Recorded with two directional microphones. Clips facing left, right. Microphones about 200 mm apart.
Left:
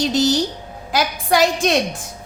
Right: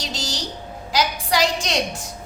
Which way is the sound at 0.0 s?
55° left (ahead or behind).